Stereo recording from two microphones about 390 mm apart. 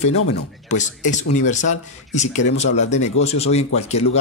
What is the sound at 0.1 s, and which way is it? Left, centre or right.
Speech, left.